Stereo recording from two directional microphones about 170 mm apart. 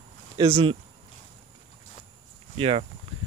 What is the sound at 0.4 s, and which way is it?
Speech, 30° right (ahead or behind).